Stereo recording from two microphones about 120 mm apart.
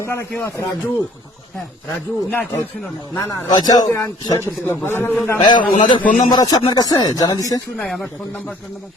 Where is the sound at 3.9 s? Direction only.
20° left (ahead or behind).